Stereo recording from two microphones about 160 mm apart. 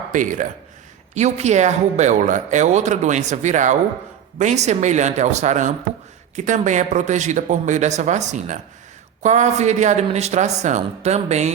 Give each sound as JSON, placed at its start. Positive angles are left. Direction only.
{"t": 0.1, "sound": "speech", "side_deg": -55}